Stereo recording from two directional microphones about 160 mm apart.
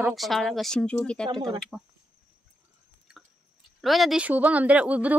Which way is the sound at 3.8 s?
Centre (ahead or behind).